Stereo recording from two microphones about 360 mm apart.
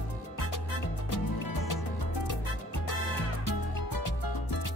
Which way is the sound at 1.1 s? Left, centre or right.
Left.